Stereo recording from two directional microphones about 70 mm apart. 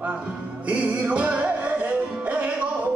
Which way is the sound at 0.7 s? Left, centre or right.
Right.